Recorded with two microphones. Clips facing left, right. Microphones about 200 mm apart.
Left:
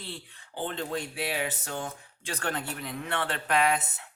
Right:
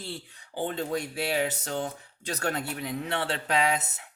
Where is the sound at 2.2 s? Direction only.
40° right (ahead or behind).